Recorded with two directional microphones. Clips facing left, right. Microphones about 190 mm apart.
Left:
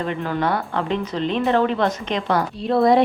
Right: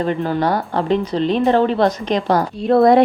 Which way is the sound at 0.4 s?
35° right (ahead or behind).